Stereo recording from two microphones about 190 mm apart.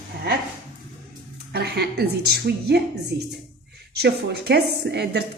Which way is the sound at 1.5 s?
60° right (ahead or behind).